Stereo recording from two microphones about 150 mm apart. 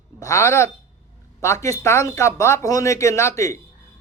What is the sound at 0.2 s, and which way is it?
Speech, 20° left (ahead or behind).